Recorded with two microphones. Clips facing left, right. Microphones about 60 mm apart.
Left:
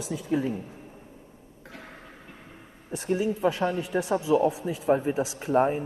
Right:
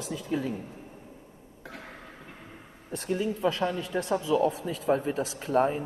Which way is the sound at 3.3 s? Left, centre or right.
Centre.